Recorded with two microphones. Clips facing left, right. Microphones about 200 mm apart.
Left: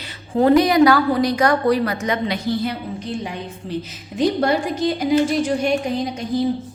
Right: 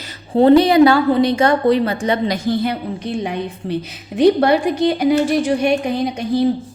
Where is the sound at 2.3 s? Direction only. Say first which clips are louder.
Right 3 dB; 60° right (ahead or behind).